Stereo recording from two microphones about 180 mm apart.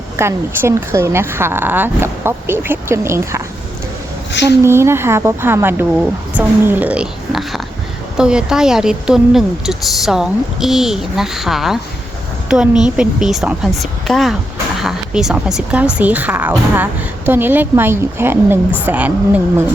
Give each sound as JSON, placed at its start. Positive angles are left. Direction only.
{"t": 0.2, "sound": "speech", "side_deg": -15}
{"t": 4.3, "sound": "a woman's voice", "side_deg": 75}
{"t": 4.6, "sound": "a woman's voice", "side_deg": -15}